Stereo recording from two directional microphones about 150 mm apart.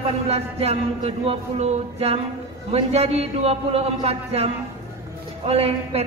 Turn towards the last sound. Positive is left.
turn(degrees=-40)  # may be behind; listen again after turning